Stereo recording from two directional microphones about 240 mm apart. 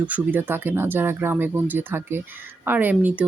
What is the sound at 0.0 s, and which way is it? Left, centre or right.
A woman's voice, centre.